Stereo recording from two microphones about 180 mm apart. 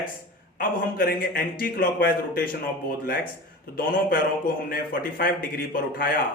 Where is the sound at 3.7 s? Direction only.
55° left (ahead or behind).